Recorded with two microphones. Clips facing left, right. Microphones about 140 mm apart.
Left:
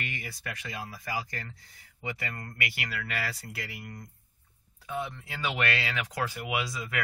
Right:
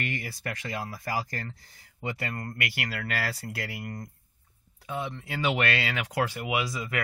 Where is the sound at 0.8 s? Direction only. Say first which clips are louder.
Right 2 dB; 40° right (ahead or behind).